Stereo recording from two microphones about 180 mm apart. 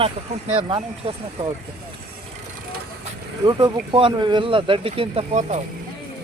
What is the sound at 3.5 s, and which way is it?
Speech, 25° right (ahead or behind).